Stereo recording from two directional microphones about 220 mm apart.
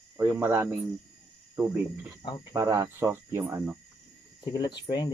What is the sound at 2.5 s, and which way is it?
Speech, 15° right (ahead or behind).